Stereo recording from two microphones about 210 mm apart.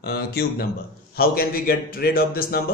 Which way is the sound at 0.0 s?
50° left (ahead or behind).